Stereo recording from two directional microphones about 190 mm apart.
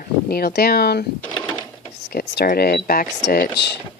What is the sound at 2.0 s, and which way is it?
Speech, 60° left (ahead or behind).